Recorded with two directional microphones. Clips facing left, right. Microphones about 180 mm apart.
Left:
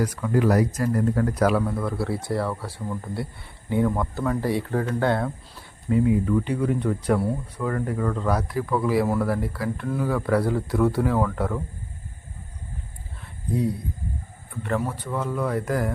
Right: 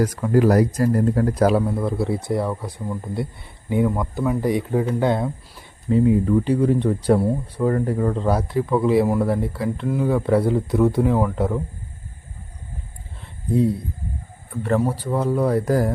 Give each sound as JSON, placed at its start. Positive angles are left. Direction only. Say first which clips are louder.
{"t": 0.0, "sound": "speech", "louder": "right 5 dB", "side_deg": -40}
{"t": 5.9, "sound": "speech", "louder": "right 4 dB", "side_deg": -30}
{"t": 13.5, "sound": "speech", "louder": "right 5 dB", "side_deg": -25}